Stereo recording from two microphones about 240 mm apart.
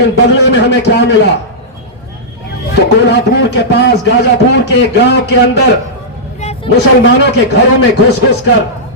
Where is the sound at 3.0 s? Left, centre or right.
Left.